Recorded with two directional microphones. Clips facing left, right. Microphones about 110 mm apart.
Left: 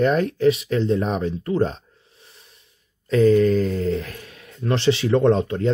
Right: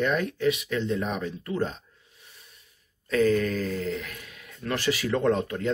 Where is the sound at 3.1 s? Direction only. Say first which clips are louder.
Left 7 dB; 30° left (ahead or behind).